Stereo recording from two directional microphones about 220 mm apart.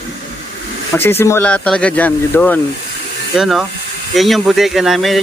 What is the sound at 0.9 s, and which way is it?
Speech, 10° left (ahead or behind).